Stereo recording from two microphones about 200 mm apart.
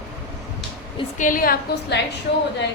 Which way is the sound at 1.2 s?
45° left (ahead or behind).